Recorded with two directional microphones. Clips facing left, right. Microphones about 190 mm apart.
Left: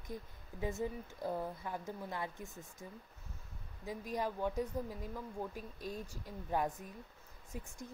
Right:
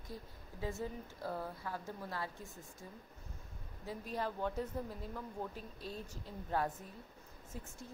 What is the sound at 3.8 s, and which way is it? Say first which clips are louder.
A woman's voice: left 2 dB; 15° left (ahead or behind).